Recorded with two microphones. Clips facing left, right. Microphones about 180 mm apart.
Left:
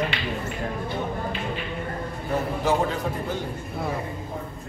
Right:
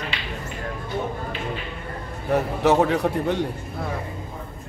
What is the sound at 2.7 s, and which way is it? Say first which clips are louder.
Speech: right 6 dB; 70° right (ahead or behind).